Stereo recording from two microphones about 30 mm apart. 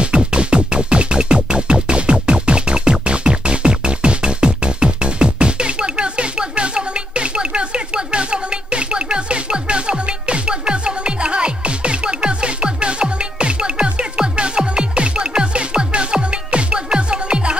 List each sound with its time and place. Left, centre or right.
0.0 s music: right